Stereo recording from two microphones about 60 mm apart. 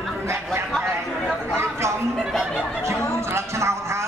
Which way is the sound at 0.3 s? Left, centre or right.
Right.